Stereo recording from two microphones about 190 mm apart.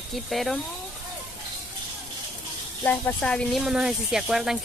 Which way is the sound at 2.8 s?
10° left (ahead or behind).